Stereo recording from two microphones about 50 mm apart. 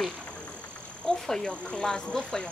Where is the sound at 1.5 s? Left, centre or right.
Left.